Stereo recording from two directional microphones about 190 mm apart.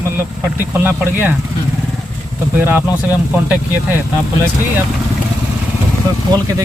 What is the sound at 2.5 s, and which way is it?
Speech, 10° right (ahead or behind).